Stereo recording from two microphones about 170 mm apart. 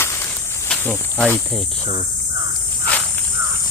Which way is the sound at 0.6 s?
10° left (ahead or behind).